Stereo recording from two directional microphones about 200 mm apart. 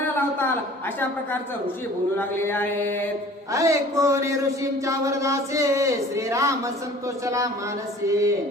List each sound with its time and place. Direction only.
2.1 s mantra: 10° left (ahead or behind)
3.5 s speech: 15° right (ahead or behind)